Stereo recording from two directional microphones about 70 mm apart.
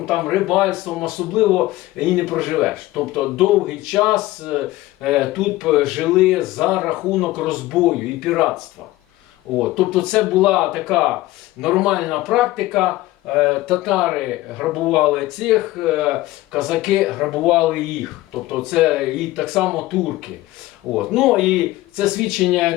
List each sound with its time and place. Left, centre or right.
0.0 s speech: centre
9.6 s speech: centre
10.4 s speech: centre
20.9 s speech: centre